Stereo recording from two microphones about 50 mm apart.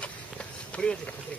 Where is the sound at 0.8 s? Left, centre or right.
Centre.